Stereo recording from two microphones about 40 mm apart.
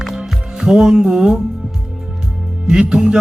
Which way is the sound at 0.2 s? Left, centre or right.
Centre.